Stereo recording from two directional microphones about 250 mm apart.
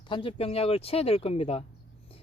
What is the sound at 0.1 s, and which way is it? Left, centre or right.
Speech, left.